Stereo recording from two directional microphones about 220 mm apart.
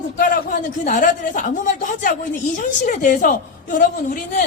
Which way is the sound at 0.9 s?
35° left (ahead or behind).